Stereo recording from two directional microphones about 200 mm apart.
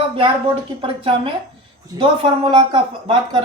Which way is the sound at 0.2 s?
25° right (ahead or behind).